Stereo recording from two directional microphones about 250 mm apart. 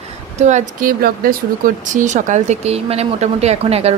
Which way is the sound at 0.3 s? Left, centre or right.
Right.